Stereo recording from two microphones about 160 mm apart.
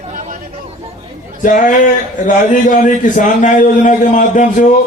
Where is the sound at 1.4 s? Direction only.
55° left (ahead or behind).